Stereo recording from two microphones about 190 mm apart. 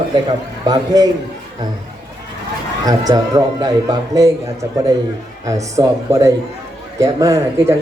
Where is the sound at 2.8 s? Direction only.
20° right (ahead or behind).